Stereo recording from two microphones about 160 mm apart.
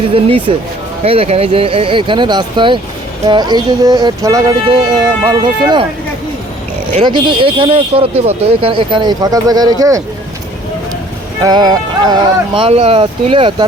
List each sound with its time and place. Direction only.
0.1 s speech: 35° right (ahead or behind)
7.0 s speech: 30° right (ahead or behind)
11.4 s speech: 25° right (ahead or behind)
12.5 s speech: 35° right (ahead or behind)